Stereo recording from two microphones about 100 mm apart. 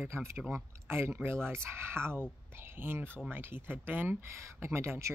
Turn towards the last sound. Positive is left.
turn(degrees=-25)  # may be behind; listen again after turning